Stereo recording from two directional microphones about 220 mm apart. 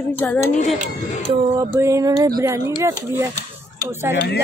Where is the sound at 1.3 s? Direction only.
15° right (ahead or behind).